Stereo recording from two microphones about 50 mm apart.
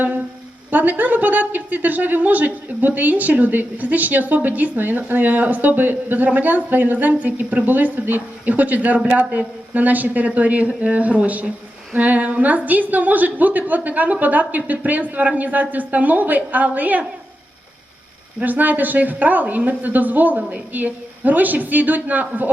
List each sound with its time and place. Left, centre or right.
0.7 s a woman's voice: right
18.4 s a woman's voice: right